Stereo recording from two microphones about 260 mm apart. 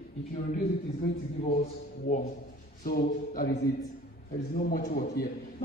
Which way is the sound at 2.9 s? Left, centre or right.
Left.